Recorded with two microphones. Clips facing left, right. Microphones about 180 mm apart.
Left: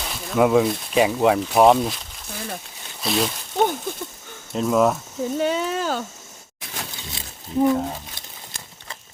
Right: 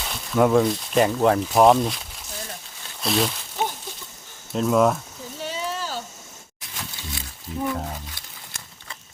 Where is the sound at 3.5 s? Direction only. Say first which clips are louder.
Left 10 dB; 55° left (ahead or behind).